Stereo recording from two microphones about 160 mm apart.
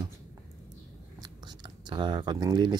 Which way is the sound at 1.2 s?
25° right (ahead or behind).